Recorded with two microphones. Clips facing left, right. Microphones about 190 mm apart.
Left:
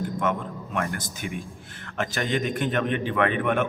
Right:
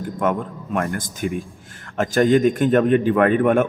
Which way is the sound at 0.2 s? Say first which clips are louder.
Right 9 dB; 50° right (ahead or behind).